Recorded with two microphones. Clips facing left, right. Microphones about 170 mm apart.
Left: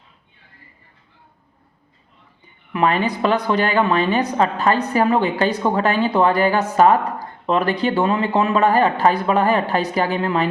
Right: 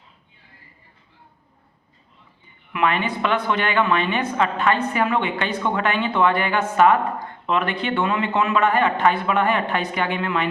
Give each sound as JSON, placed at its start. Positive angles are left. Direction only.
{"t": 2.7, "sound": "a woman's voice", "side_deg": 35}